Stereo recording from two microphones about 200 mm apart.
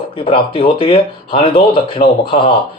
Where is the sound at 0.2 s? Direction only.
25° left (ahead or behind).